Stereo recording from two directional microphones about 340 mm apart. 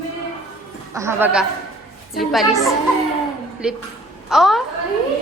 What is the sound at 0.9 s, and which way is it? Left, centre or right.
A woman's voice, centre.